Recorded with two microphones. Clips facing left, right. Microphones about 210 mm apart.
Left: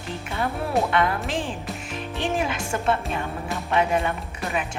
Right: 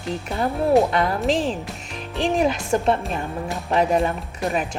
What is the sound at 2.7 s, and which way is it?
Speech, 35° right (ahead or behind).